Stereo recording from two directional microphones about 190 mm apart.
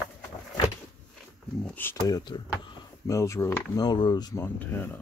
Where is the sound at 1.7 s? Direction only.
10° left (ahead or behind).